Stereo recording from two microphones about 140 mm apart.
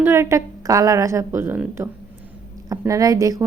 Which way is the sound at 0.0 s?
20° right (ahead or behind).